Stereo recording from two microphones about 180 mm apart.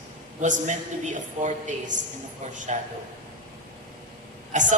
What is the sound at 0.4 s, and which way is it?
A man's voice, 45° right (ahead or behind).